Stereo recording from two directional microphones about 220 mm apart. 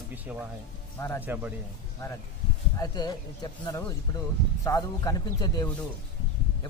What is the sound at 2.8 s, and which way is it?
Speech, 15° left (ahead or behind).